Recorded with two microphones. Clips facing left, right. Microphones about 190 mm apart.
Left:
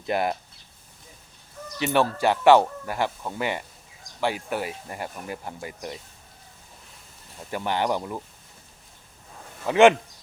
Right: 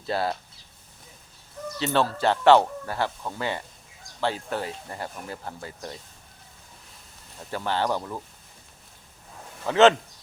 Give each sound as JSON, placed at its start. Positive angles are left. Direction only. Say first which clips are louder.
{"t": 0.0, "sound": "speech", "louder": "left 2 dB", "side_deg": 15}
{"t": 1.8, "sound": "speech", "louder": "left 2 dB", "side_deg": 15}
{"t": 7.5, "sound": "speech", "louder": "left 1 dB", "side_deg": 15}
{"t": 9.6, "sound": "speech", "louder": "left 1 dB", "side_deg": 15}